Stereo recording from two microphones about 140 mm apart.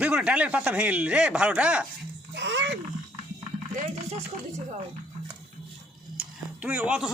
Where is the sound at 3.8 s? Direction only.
55° right (ahead or behind).